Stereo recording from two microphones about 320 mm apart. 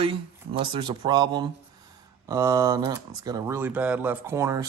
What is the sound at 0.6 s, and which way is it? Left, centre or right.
A man's voice, centre.